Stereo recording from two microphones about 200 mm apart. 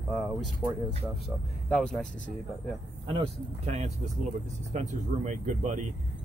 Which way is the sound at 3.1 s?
30° right (ahead or behind).